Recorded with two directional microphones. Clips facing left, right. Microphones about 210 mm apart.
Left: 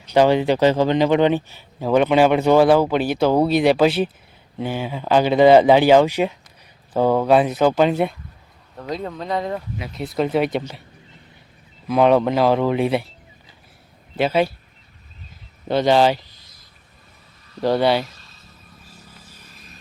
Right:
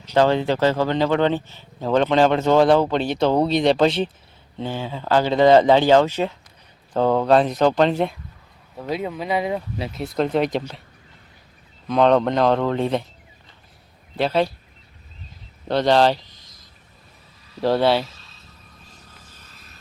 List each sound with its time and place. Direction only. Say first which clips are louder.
0.1 s speech: left 2 dB; 15° left (ahead or behind)
8.7 s speech: right 2 dB; 5° right (ahead or behind)
11.9 s speech: left 1 dB; 10° left (ahead or behind)
14.2 s speech: left 2 dB; 5° left (ahead or behind)
15.6 s speech: left 1 dB; 5° left (ahead or behind)
17.5 s speech: even; centre (ahead or behind)
18.9 s vehicle: left 3 dB; 10° left (ahead or behind)